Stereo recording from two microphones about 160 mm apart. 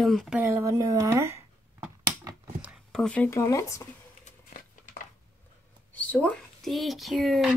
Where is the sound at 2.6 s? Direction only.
Centre (ahead or behind).